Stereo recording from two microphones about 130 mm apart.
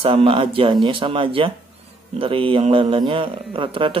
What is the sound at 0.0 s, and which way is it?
Speech, 45° right (ahead or behind).